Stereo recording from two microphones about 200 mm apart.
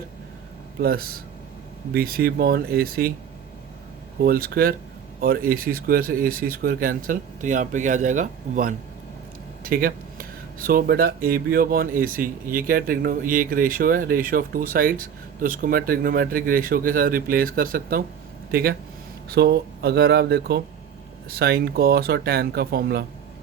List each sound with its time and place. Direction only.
0.8 s speech: 50° right (ahead or behind)
4.2 s speech: 50° right (ahead or behind)